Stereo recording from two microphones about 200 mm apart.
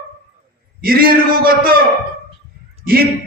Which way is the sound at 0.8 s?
45° right (ahead or behind).